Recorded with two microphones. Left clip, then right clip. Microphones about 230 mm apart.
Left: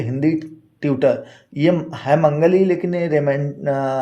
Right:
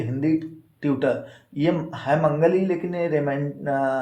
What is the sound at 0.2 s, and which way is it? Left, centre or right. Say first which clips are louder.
Speech: left 3 dB; left.